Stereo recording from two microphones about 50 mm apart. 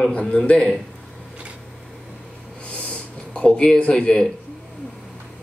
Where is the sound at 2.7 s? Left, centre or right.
Left.